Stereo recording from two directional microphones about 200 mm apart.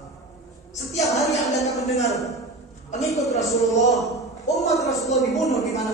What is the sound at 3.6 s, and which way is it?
A man's voice, centre (ahead or behind).